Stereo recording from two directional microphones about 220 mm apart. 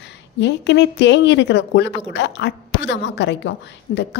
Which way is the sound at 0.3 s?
50° left (ahead or behind).